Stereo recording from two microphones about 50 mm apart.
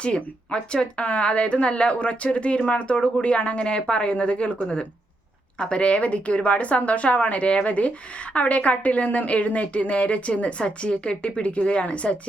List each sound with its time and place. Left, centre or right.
0.0 s a woman's voice: centre